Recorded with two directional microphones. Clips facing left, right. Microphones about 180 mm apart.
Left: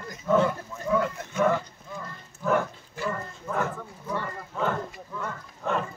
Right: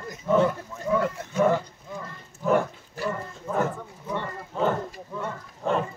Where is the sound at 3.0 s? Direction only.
10° right (ahead or behind).